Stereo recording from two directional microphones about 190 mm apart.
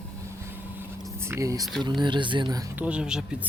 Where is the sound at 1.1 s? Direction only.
15° right (ahead or behind).